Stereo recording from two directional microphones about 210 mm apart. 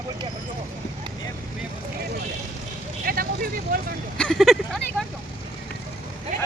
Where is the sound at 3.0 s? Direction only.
45° right (ahead or behind).